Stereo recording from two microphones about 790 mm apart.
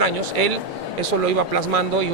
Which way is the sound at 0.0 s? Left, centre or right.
Right.